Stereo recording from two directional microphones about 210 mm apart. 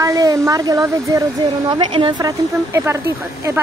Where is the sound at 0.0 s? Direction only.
15° right (ahead or behind).